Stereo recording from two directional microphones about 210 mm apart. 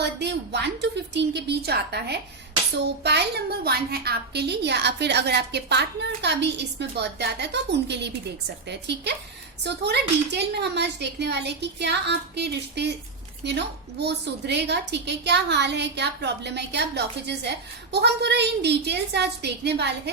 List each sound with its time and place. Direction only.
0.0 s a woman's voice: 55° right (ahead or behind)